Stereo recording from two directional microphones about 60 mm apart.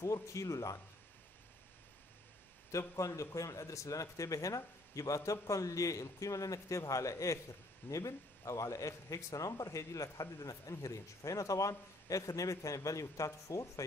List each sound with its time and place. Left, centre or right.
0.0 s speech: left
3.0 s speech: left